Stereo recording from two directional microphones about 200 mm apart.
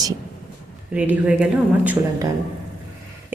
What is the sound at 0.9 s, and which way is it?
A woman's voice, 5° right (ahead or behind).